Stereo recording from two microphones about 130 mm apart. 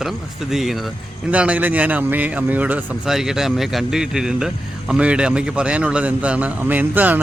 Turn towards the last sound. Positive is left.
turn(degrees=-10)  # may be behind; listen again after turning